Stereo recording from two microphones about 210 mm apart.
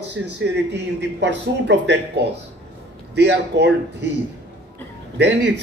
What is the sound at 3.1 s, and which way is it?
Speech, 55° right (ahead or behind).